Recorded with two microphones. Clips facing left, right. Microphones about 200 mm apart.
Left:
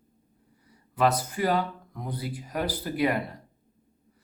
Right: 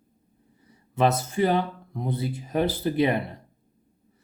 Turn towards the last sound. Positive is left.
turn(degrees=-25)  # may be behind; listen again after turning